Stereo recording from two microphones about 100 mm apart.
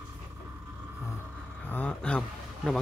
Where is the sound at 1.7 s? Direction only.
15° left (ahead or behind).